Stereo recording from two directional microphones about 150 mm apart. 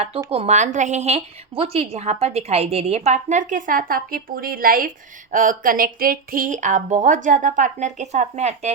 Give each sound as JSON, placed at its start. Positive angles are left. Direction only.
{"t": 0.3, "sound": "a woman's voice", "side_deg": -45}
{"t": 5.3, "sound": "speech", "side_deg": -60}